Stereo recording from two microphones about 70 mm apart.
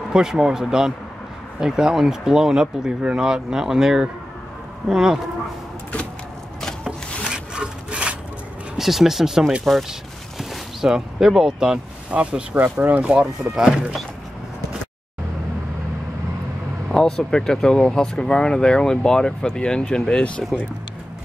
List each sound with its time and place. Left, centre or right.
0.1 s speech: centre
7.2 s wood: centre
8.7 s speech: centre
16.9 s speech: centre